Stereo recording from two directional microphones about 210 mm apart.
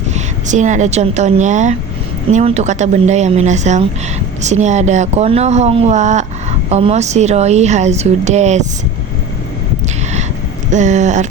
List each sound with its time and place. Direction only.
0.1 s a woman's voice: 35° right (ahead or behind)
10.7 s a woman's voice: 35° right (ahead or behind)